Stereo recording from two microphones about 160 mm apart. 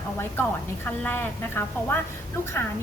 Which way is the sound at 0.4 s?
15° left (ahead or behind).